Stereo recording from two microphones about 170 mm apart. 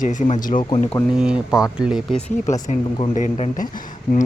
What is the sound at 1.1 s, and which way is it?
Speech, 5° right (ahead or behind).